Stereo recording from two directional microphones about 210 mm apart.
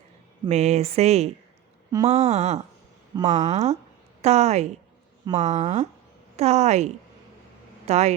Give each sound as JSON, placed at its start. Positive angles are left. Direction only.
{"t": 0.4, "sound": "speech", "side_deg": -30}